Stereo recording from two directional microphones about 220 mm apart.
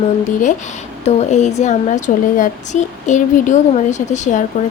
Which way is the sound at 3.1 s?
35° left (ahead or behind).